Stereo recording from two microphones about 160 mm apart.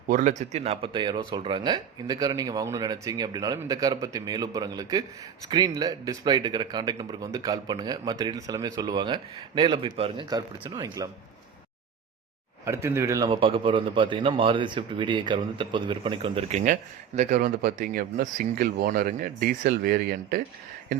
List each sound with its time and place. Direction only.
0.1 s speech: 50° right (ahead or behind); by 11.1 s 25° right (ahead or behind)
12.6 s speech: 15° right (ahead or behind)
13.3 s speech: 30° right (ahead or behind)
16.5 s speech: 50° right (ahead or behind); by 20.4 s 65° right (ahead or behind)